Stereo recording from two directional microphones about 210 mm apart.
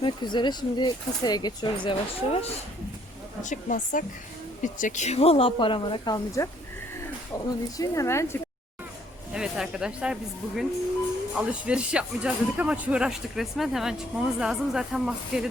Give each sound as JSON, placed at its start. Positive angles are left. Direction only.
{"t": 0.0, "sound": "speech", "side_deg": 20}
{"t": 3.4, "sound": "speech", "side_deg": 35}
{"t": 7.8, "sound": "speech", "side_deg": 15}
{"t": 9.3, "sound": "speech", "side_deg": -5}